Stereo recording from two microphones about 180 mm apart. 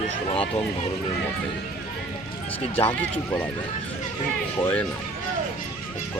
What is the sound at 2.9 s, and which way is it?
Speech, 10° left (ahead or behind).